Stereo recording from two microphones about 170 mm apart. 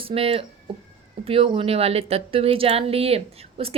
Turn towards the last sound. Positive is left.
turn(degrees=-35)  # may be behind; listen again after turning